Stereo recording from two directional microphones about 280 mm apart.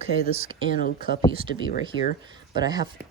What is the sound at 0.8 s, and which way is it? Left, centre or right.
Speech, left.